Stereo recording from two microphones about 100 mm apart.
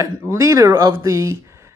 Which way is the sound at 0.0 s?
30° right (ahead or behind).